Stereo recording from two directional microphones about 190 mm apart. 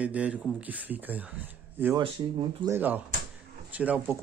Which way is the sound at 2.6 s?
10° right (ahead or behind).